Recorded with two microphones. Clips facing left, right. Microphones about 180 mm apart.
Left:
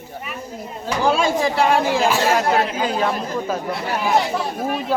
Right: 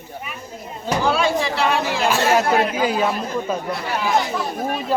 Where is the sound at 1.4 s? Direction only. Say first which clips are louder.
Left 3 dB; 50° left (ahead or behind).